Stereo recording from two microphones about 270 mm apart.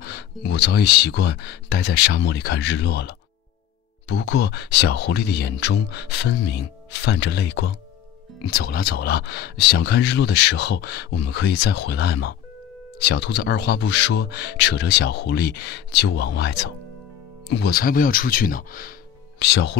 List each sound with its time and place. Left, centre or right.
0.0 s speech: left